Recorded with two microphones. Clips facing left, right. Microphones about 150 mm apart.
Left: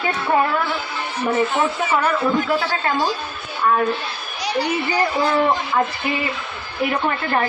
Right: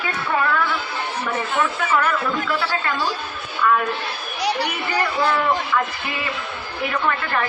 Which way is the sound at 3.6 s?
35° left (ahead or behind).